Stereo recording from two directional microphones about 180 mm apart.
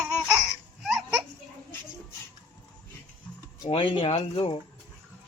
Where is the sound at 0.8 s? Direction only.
Centre (ahead or behind).